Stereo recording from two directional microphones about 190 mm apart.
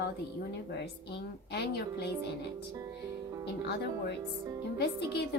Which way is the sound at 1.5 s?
60° left (ahead or behind).